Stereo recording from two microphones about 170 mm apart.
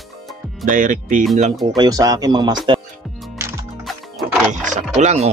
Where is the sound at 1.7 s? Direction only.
20° right (ahead or behind).